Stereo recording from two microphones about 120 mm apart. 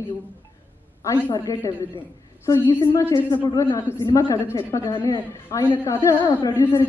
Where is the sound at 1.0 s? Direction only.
20° left (ahead or behind).